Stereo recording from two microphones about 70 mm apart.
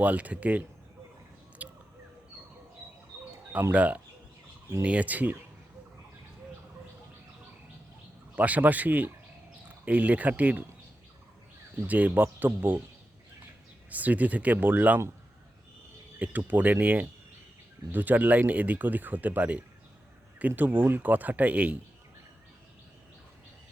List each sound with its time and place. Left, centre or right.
0.0 s speech: right
1.6 s a sound: right
3.7 s speech: right
8.4 s speech: right
11.9 s speech: right
13.9 s speech: right
16.1 s speech: right